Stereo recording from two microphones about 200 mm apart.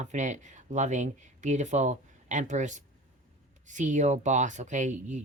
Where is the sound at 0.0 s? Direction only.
35° right (ahead or behind).